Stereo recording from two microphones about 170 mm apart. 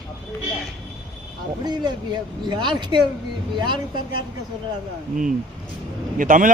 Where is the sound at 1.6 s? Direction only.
25° right (ahead or behind).